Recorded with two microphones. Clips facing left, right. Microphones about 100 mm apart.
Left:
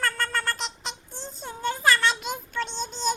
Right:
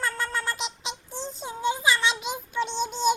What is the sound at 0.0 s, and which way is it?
Meow, centre (ahead or behind).